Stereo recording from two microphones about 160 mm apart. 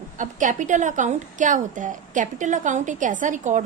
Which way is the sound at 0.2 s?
55° right (ahead or behind).